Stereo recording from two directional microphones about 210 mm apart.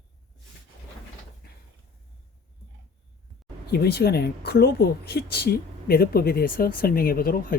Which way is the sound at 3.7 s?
50° left (ahead or behind).